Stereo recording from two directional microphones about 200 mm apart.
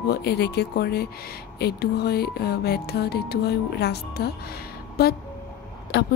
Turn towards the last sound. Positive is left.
turn(degrees=55)  # may be behind; listen again after turning